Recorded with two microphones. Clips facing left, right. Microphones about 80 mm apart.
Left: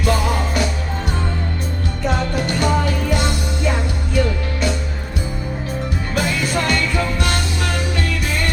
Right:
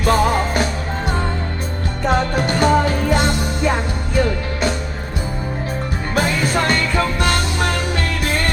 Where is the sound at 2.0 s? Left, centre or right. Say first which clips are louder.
Right 3 dB; right.